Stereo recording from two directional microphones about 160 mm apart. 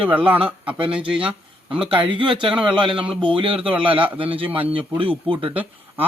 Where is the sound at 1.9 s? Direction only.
30° right (ahead or behind).